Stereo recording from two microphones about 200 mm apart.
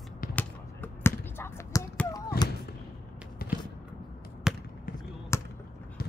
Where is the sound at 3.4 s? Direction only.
50° left (ahead or behind).